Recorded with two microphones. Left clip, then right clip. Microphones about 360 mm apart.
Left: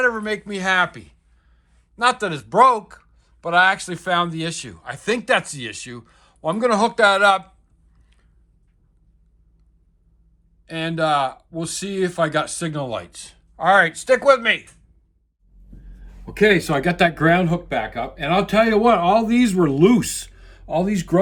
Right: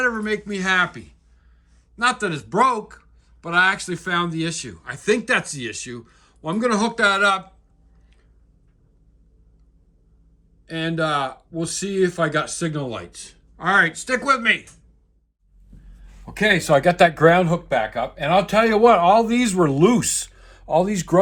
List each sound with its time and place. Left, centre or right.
0.0 s speech: centre
10.7 s speech: centre
16.2 s speech: centre